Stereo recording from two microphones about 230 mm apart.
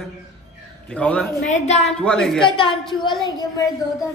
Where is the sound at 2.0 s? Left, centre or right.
Centre.